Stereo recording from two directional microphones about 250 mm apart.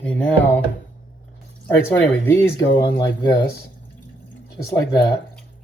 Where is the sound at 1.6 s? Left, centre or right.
Centre.